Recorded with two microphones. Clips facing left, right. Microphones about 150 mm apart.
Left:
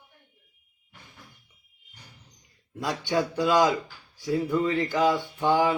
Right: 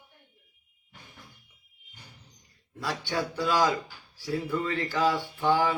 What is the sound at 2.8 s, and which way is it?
Speech, 20° left (ahead or behind).